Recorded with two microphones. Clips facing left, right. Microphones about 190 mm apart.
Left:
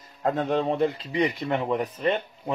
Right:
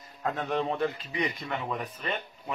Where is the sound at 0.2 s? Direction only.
30° left (ahead or behind).